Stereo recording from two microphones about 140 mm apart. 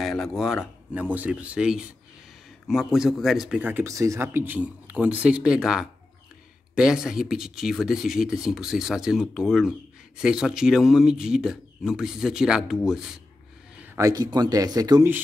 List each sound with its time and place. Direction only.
0.0 s speech: centre (ahead or behind)
13.9 s speech: 25° right (ahead or behind)